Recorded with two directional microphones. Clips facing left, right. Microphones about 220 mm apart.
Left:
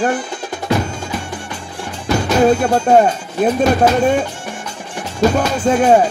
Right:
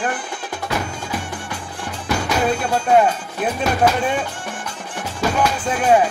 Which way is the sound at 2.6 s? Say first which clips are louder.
Left 4 dB; 40° left (ahead or behind).